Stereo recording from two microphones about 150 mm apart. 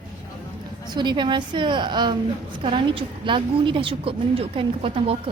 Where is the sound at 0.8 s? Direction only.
30° right (ahead or behind).